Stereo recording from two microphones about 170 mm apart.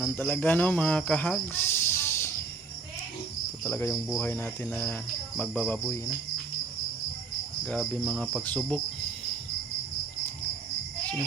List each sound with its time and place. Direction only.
0.0 s cricket: 10° left (ahead or behind)
3.6 s cricket: 15° left (ahead or behind)
3.9 s cricket: 5° left (ahead or behind)
7.6 s cricket: 5° left (ahead or behind)